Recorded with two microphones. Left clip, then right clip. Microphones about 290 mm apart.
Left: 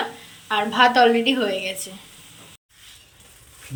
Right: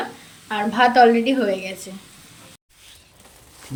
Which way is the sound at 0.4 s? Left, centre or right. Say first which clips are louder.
Left 1 dB; centre.